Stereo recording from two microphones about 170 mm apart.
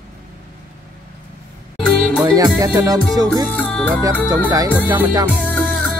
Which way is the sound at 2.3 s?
25° right (ahead or behind).